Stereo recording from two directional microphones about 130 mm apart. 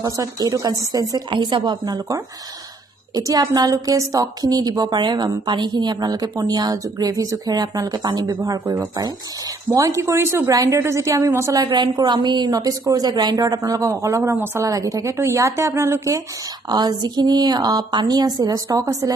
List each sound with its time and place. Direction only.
0.0 s a woman's voice: 30° right (ahead or behind)
3.2 s a woman's voice: 30° right (ahead or behind)
9.8 s a woman's voice: 25° right (ahead or behind)
16.6 s speech: 30° right (ahead or behind)